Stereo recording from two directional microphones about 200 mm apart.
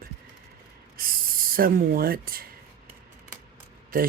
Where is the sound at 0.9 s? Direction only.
45° right (ahead or behind).